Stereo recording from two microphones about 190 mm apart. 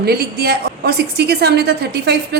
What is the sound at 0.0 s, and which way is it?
A woman's voice, 55° right (ahead or behind).